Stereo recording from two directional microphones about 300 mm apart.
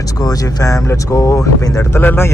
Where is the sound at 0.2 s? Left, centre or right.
Centre.